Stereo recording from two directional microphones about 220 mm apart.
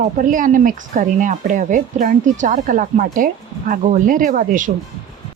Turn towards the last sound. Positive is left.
turn(degrees=-35)  # may be behind; listen again after turning